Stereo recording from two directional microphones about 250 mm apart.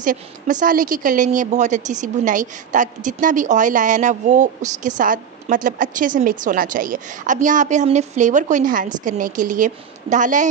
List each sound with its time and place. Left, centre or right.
0.0 s a woman's voice: right